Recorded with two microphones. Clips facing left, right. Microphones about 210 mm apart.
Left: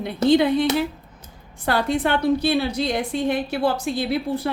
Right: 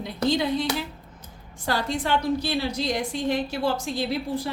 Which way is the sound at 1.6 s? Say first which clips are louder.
Left 5 dB; 60° left (ahead or behind).